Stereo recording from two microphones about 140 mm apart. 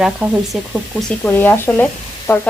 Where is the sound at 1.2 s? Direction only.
15° left (ahead or behind).